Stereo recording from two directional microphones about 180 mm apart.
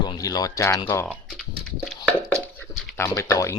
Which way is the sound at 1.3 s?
Centre (ahead or behind).